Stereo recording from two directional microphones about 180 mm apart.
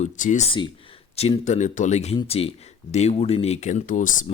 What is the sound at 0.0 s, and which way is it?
Speech, 40° left (ahead or behind).